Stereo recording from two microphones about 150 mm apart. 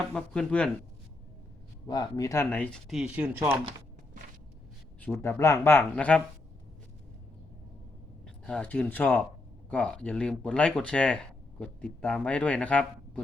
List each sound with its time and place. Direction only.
0.1 s speech: 10° left (ahead or behind)
1.9 s speech: 25° left (ahead or behind)
2.9 s speech: 5° right (ahead or behind)
4.9 s speech: 15° left (ahead or behind)
8.4 s speech: 10° left (ahead or behind)